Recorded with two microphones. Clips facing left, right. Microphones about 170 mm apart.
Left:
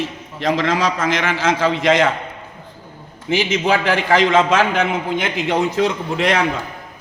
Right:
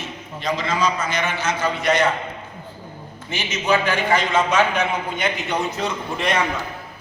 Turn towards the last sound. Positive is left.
turn(degrees=90)